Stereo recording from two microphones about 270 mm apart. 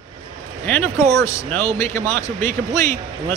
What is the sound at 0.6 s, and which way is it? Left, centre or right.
Speech, centre.